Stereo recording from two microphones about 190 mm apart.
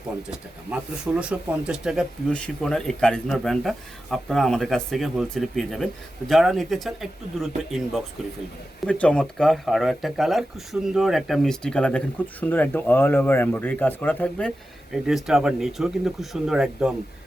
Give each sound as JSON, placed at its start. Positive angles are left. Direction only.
{"t": 0.3, "sound": "speech", "side_deg": -5}
{"t": 8.9, "sound": "speech", "side_deg": 5}